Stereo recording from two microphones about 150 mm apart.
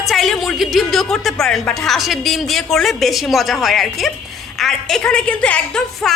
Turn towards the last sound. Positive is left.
turn(degrees=5)  # may be behind; listen again after turning